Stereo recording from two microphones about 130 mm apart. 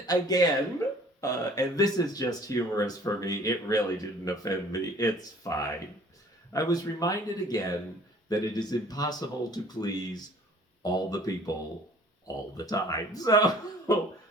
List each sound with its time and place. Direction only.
0.0 s speech: 30° left (ahead or behind)
12.5 s speech: 30° left (ahead or behind)